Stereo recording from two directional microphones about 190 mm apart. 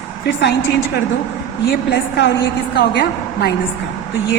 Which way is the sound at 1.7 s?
60° left (ahead or behind).